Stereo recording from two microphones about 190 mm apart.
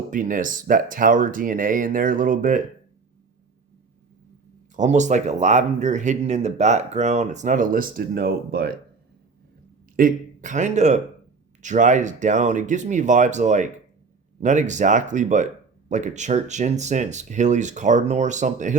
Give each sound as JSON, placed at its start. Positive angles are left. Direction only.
{"t": 0.1, "sound": "speech", "side_deg": -45}
{"t": 4.8, "sound": "speech", "side_deg": -40}
{"t": 9.9, "sound": "a man's voice", "side_deg": -45}